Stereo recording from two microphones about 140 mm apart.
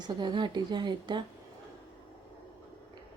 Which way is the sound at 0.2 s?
30° right (ahead or behind).